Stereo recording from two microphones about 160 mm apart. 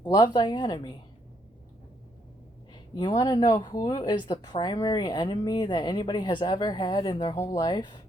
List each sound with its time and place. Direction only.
0.0 s speech: 25° left (ahead or behind)
2.9 s speech: 25° left (ahead or behind)